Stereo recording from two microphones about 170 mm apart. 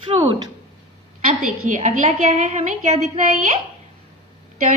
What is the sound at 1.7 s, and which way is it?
A woman's voice, 45° right (ahead or behind).